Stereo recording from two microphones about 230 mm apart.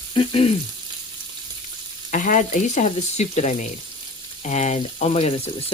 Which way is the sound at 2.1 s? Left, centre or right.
Left.